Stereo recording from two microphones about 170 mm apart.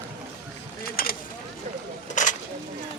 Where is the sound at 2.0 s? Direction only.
45° left (ahead or behind).